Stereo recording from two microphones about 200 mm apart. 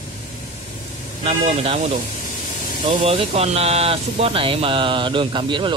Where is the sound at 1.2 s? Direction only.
30° right (ahead or behind).